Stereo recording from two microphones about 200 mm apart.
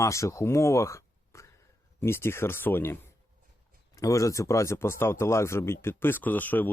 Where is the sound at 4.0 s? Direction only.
15° left (ahead or behind).